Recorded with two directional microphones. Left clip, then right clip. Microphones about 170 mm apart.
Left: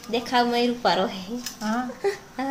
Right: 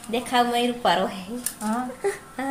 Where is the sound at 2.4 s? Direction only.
5° left (ahead or behind).